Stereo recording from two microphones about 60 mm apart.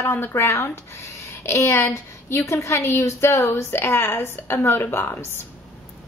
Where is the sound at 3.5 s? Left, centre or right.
Left.